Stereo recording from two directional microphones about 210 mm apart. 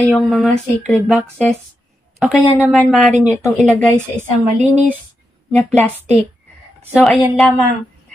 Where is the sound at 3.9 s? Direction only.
10° right (ahead or behind).